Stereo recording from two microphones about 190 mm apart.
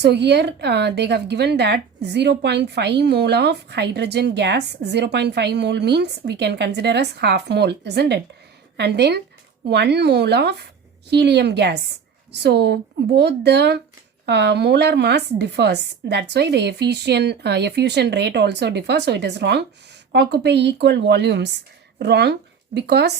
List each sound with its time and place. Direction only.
0.0 s a woman's voice: 65° right (ahead or behind)